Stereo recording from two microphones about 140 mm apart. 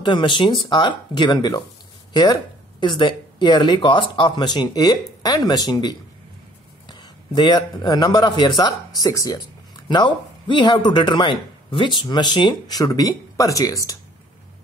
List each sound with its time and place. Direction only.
0.0 s speech: 35° left (ahead or behind)
2.8 s a man's voice: 35° left (ahead or behind)